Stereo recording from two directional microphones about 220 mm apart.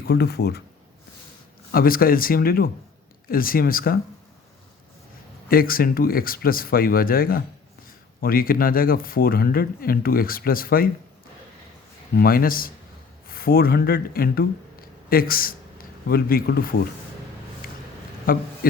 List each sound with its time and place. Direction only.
0.1 s speech: 45° left (ahead or behind)
1.7 s speech: 40° left (ahead or behind)
5.5 s speech: 40° left (ahead or behind)
12.1 s speech: 40° left (ahead or behind)
17.6 s a sound: 40° left (ahead or behind)
18.3 s speech: 40° left (ahead or behind)